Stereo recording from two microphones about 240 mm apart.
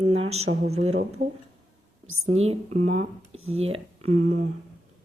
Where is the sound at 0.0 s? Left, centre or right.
Right.